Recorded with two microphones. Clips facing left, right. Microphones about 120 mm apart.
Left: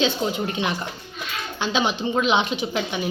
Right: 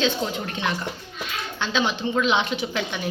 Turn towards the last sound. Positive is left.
turn(degrees=15)  # may be behind; listen again after turning